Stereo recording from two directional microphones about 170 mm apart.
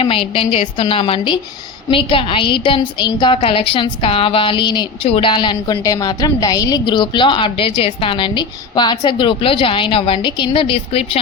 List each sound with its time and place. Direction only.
0.0 s a woman's voice: 30° left (ahead or behind)